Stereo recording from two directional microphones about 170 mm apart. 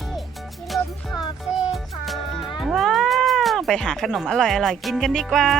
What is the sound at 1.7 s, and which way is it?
Music, centre (ahead or behind).